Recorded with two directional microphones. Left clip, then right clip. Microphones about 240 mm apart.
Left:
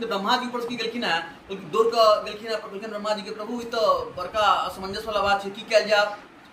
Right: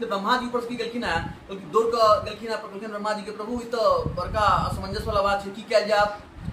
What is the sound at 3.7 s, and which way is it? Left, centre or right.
A man's voice, centre.